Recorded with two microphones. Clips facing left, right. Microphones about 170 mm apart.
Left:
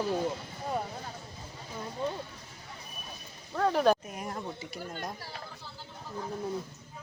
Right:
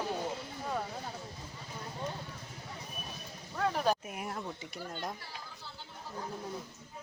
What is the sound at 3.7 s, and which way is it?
Speech, 75° left (ahead or behind).